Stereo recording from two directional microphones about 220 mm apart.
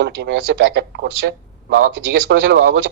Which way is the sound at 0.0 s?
50° right (ahead or behind).